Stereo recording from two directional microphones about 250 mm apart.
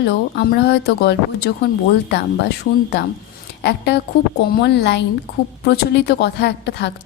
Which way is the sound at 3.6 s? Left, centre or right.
Left.